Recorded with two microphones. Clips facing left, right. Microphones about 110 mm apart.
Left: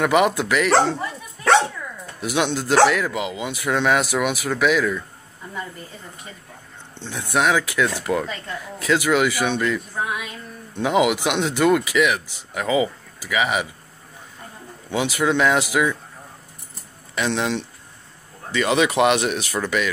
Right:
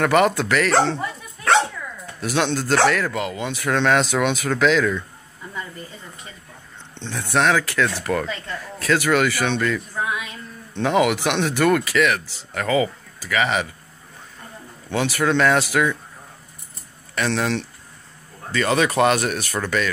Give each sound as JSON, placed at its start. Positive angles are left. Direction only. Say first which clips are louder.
{"t": 0.0, "sound": "speech", "louder": "right 1 dB", "side_deg": 15}
{"t": 2.1, "sound": "speech", "louder": "even", "side_deg": 15}
{"t": 7.0, "sound": "speech", "louder": "right 1 dB", "side_deg": 10}
{"t": 14.9, "sound": "speech", "louder": "even", "side_deg": 15}
{"t": 17.1, "sound": "speech", "louder": "even", "side_deg": 15}